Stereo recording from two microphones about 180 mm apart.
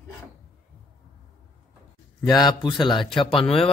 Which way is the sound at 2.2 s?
20° left (ahead or behind).